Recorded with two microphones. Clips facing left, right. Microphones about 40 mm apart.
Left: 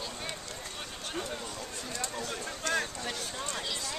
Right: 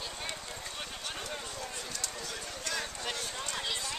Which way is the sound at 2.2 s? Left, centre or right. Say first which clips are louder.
Left 4 dB; left.